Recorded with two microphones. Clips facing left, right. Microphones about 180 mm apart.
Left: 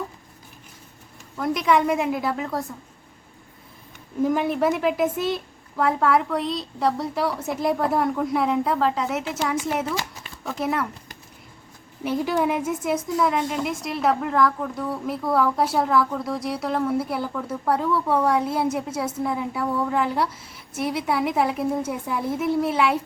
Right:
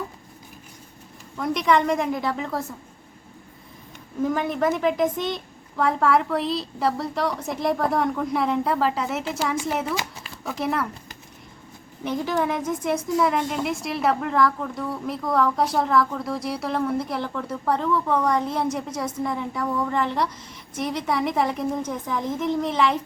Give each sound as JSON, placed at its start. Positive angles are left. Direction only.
{"t": 1.4, "sound": "a woman's voice", "side_deg": 0}
{"t": 4.2, "sound": "a woman's voice", "side_deg": 10}
{"t": 12.0, "sound": "a woman's voice", "side_deg": 10}